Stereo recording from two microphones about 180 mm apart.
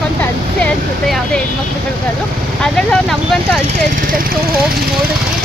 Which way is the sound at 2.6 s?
5° left (ahead or behind).